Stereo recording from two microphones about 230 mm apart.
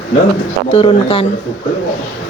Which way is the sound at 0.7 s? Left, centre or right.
Left.